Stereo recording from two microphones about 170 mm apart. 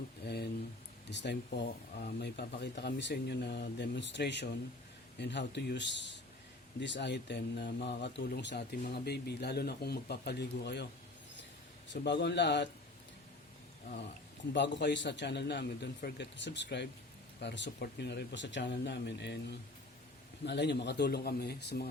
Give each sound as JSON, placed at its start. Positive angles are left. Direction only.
{"t": 1.1, "sound": "speech", "side_deg": 90}
{"t": 8.8, "sound": "speech", "side_deg": 70}
{"t": 11.9, "sound": "speech", "side_deg": 90}
{"t": 14.5, "sound": "speech", "side_deg": 90}
{"t": 16.0, "sound": "speech", "side_deg": 75}